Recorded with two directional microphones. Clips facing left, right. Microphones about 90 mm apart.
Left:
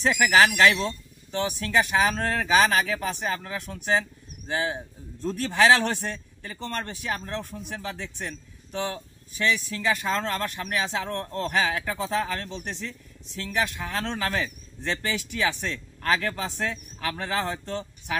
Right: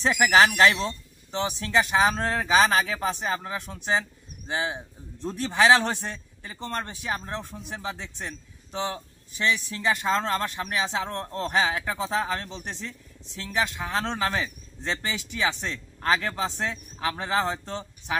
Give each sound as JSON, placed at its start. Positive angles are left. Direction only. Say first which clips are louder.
{"t": 0.5, "sound": "a man's voice", "louder": "even", "side_deg": -30}